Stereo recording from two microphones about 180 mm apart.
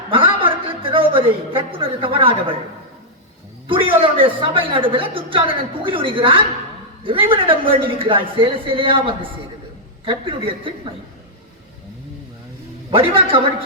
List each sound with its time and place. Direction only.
0.1 s a sound: 30° right (ahead or behind)
3.7 s a woman's voice: 30° right (ahead or behind)
12.9 s a woman's voice: 30° right (ahead or behind)